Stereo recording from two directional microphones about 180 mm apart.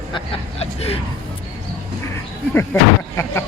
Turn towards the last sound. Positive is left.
turn(degrees=15)  # may be behind; listen again after turning